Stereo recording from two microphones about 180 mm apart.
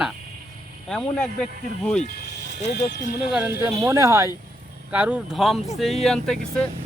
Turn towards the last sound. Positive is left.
turn(degrees=0)  # may be behind; listen again after turning